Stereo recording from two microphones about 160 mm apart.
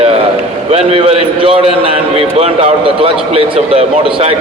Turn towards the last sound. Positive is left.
turn(degrees=-35)  # may be behind; listen again after turning